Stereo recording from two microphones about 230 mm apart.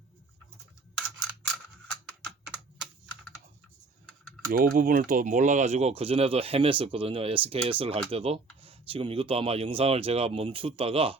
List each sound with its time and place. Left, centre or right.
4.5 s speech: right